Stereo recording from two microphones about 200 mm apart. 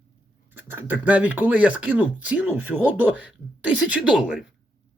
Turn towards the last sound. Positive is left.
turn(degrees=-5)  # may be behind; listen again after turning